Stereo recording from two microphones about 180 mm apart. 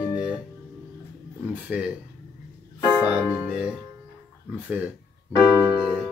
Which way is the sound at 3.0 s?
10° right (ahead or behind).